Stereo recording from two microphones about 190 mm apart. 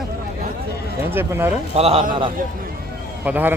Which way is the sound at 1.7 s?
30° right (ahead or behind).